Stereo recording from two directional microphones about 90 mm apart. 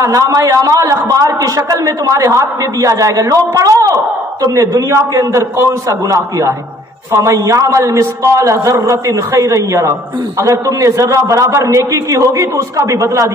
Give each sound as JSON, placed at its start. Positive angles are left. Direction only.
{"t": 0.0, "sound": "a man's voice", "side_deg": -40}